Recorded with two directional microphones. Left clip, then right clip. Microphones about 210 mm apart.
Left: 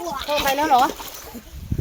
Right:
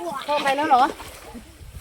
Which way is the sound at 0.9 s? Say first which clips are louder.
Left 2 dB; 55° left (ahead or behind).